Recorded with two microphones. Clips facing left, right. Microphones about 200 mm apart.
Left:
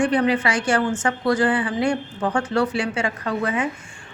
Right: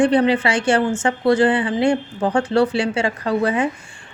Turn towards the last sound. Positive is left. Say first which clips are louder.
# right 5 dB
turn(degrees=-35)  # may be behind; listen again after turning